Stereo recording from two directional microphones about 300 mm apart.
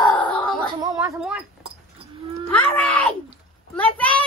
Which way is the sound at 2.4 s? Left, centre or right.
Centre.